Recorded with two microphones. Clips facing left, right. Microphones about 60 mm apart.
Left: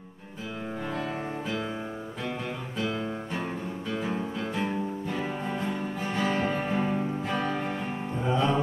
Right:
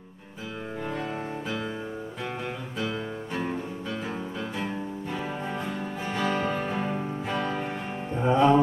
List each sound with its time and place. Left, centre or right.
3.9 s music: centre
8.2 s music: right